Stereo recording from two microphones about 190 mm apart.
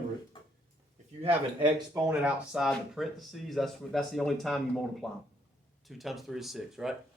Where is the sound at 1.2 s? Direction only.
25° right (ahead or behind).